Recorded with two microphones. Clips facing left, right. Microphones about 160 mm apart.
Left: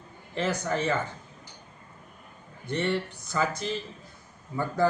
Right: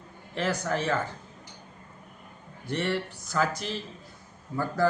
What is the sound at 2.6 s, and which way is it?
Speech, centre (ahead or behind).